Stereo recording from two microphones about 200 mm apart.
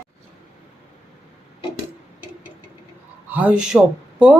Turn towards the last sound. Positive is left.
turn(degrees=-5)  # may be behind; listen again after turning